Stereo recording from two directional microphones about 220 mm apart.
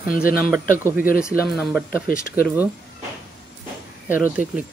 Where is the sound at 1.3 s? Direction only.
Centre (ahead or behind).